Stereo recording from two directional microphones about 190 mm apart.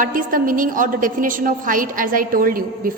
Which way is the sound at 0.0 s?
45° right (ahead or behind).